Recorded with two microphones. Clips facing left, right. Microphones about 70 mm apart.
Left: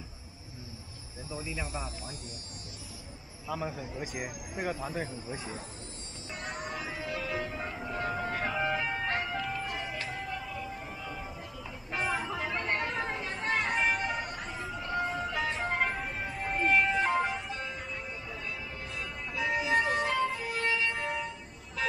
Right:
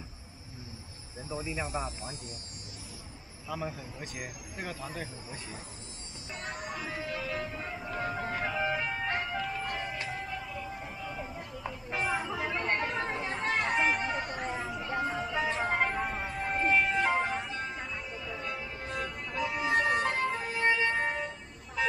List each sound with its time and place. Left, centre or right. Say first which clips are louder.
1.3 s speech: right 3 dB; right
3.4 s a man's voice: left 2 dB; centre
6.3 s music: left 1 dB; centre
11.9 s chatter: even; centre
13.4 s a sound: right 1 dB; centre
14.6 s music: left 3 dB; centre
18.4 s music: right 2 dB; right
20.5 s siren: right 6 dB; right